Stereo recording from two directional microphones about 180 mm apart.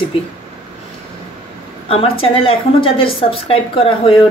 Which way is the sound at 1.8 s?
30° left (ahead or behind).